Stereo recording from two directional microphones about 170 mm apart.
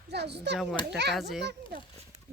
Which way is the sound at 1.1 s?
Centre (ahead or behind).